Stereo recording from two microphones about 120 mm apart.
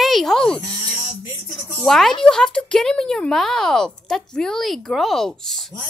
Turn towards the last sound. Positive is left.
turn(degrees=0)  # may be behind; listen again after turning